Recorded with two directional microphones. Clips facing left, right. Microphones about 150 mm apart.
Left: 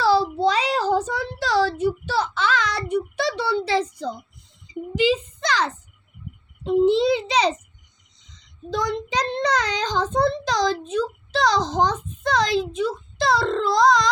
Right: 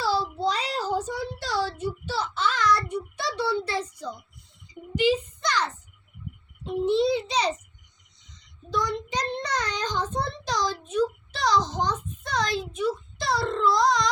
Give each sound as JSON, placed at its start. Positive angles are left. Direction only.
{"t": 0.0, "sound": "child singing", "side_deg": 80}
{"t": 4.9, "sound": "a sound", "side_deg": 90}
{"t": 8.3, "sound": "child singing", "side_deg": 90}